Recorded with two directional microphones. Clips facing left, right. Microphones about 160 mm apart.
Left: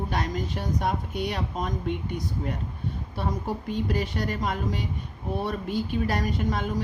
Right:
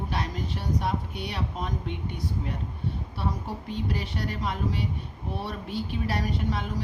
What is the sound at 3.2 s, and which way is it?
A woman's voice, 45° left (ahead or behind).